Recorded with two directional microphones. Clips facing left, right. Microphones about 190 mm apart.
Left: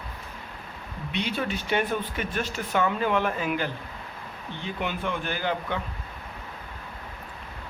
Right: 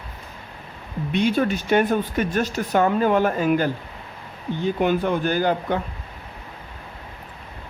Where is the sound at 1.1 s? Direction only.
45° right (ahead or behind).